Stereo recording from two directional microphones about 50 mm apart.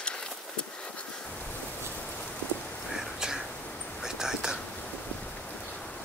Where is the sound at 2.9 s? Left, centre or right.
Centre.